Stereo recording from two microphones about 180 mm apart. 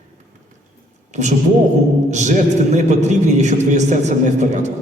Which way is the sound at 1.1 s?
40° right (ahead or behind).